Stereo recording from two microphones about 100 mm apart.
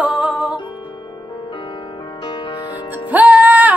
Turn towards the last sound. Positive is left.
turn(degrees=-15)  # may be behind; listen again after turning